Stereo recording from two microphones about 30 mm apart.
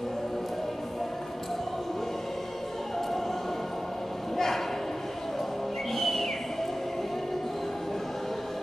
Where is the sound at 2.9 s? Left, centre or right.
Centre.